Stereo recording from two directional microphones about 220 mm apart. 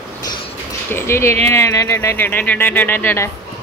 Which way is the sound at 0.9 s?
10° left (ahead or behind).